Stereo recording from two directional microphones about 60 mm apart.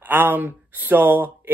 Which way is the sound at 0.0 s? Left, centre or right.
Right.